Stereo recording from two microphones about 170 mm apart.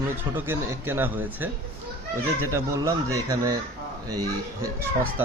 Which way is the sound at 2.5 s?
15° right (ahead or behind).